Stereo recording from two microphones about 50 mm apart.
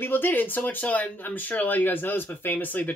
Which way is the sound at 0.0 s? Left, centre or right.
Left.